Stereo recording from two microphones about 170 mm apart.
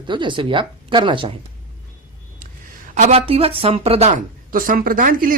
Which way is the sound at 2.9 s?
45° right (ahead or behind).